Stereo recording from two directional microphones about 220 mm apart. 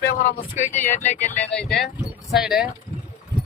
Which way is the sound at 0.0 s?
40° left (ahead or behind).